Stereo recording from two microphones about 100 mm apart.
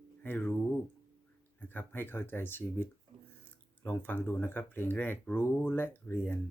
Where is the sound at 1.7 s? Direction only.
20° left (ahead or behind).